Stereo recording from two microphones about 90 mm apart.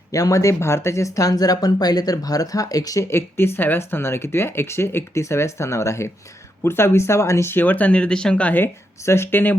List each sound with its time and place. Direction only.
0.1 s speech: 40° left (ahead or behind); by 9.6 s 20° left (ahead or behind)